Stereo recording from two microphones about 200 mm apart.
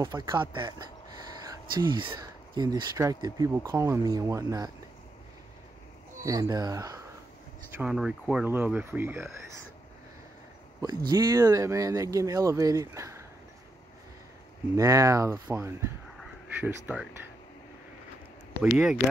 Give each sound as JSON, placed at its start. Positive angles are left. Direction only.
{"t": 0.0, "sound": "speech", "side_deg": -20}
{"t": 6.2, "sound": "speech", "side_deg": -15}
{"t": 7.7, "sound": "speech", "side_deg": -5}
{"t": 11.1, "sound": "speech", "side_deg": -20}
{"t": 14.8, "sound": "speech", "side_deg": -15}
{"t": 16.2, "sound": "duck", "side_deg": -5}
{"t": 18.6, "sound": "speech", "side_deg": -5}